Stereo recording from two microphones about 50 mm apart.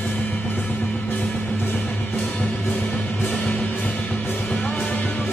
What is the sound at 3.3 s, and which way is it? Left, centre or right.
Music, left.